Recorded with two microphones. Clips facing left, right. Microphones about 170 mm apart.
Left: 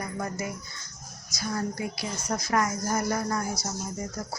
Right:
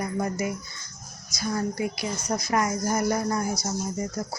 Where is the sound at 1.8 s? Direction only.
15° right (ahead or behind).